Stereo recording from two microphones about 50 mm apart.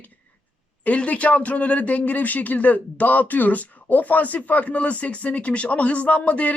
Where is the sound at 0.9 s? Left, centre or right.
Left.